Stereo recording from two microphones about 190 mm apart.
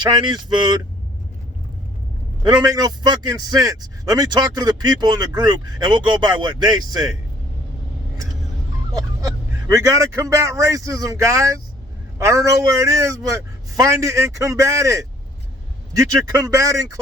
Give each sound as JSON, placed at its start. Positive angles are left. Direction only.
{"t": 0.0, "sound": "a man's voice", "side_deg": -25}
{"t": 2.5, "sound": "a man's voice", "side_deg": -20}
{"t": 8.9, "sound": "a sound", "side_deg": -20}
{"t": 9.7, "sound": "a man's voice", "side_deg": -15}